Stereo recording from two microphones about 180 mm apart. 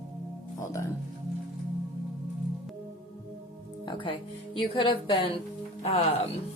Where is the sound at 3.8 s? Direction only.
30° left (ahead or behind).